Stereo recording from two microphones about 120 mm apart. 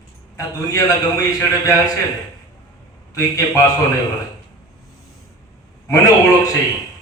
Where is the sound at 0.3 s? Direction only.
30° left (ahead or behind).